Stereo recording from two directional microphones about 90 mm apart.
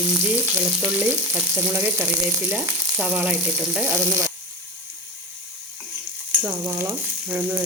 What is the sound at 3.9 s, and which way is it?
Sizzle, 40° right (ahead or behind).